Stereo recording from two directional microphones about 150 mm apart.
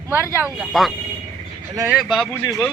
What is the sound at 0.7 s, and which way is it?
Speech, centre (ahead or behind).